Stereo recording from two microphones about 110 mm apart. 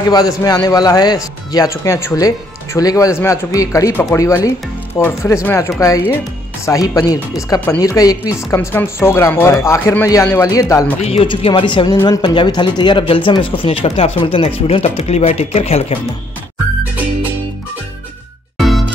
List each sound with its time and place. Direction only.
0.1 s speech: 35° left (ahead or behind)
8.5 s speech: 20° left (ahead or behind)
11.0 s speech: 70° left (ahead or behind)
11.2 s speech: 50° left (ahead or behind); by 16.0 s 65° left (ahead or behind)
18.6 s music: centre (ahead or behind)